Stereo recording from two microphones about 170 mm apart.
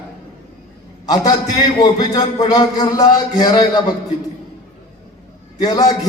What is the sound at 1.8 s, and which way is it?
A man's voice, 25° left (ahead or behind).